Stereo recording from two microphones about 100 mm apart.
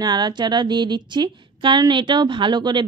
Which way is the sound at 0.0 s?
45° right (ahead or behind).